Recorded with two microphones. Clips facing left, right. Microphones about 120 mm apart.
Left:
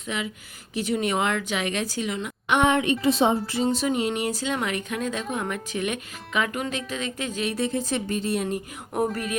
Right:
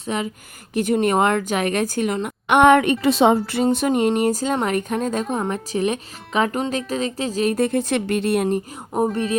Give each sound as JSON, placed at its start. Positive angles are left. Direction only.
{"t": 0.0, "sound": "speech", "side_deg": -40}
{"t": 0.7, "sound": "a woman's voice", "side_deg": -50}